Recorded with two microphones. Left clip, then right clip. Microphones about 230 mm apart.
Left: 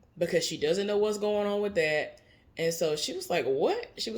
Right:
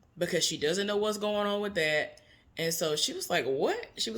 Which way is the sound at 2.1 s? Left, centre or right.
Centre.